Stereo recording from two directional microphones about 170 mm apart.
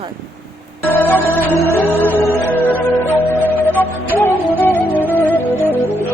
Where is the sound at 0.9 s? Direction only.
10° left (ahead or behind).